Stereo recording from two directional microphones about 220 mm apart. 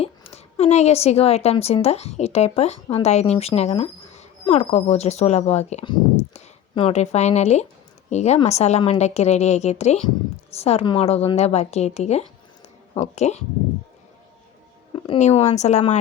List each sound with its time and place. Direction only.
0.0 s a woman's voice: 25° left (ahead or behind)
14.9 s a woman's voice: 25° left (ahead or behind)